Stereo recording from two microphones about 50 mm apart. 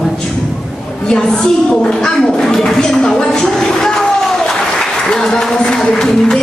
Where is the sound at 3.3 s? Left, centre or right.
Centre.